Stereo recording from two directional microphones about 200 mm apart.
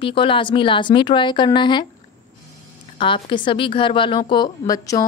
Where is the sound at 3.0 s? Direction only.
25° left (ahead or behind).